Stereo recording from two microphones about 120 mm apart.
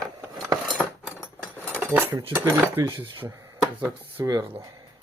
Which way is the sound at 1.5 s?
15° left (ahead or behind).